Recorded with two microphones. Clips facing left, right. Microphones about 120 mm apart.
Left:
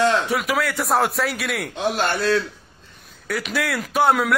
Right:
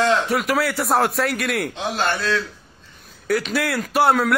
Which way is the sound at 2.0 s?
60° left (ahead or behind).